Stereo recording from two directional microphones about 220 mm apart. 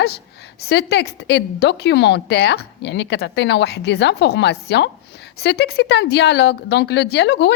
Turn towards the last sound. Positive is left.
turn(degrees=50)  # may be behind; listen again after turning